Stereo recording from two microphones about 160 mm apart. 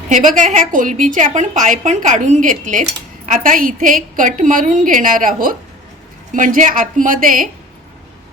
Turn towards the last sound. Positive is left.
turn(degrees=-60)  # may be behind; listen again after turning